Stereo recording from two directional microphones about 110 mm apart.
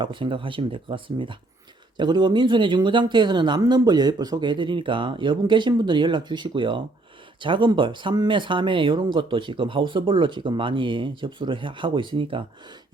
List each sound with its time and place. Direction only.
0.0 s speech: 50° right (ahead or behind)